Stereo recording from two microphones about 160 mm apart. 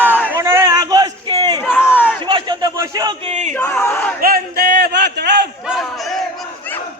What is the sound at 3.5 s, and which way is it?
Crowd, 15° left (ahead or behind).